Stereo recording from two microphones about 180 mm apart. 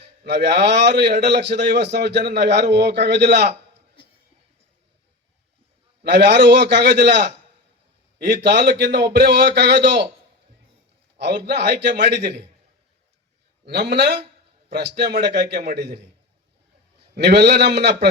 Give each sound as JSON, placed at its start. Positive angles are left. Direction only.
{"t": 0.3, "sound": "a man's voice", "side_deg": -70}
{"t": 6.0, "sound": "a man's voice", "side_deg": -70}
{"t": 11.2, "sound": "a man's voice", "side_deg": -70}
{"t": 13.7, "sound": "a man's voice", "side_deg": -70}
{"t": 17.2, "sound": "a man's voice", "side_deg": -75}